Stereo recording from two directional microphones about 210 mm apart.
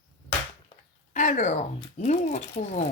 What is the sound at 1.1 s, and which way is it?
Speech, 35° left (ahead or behind).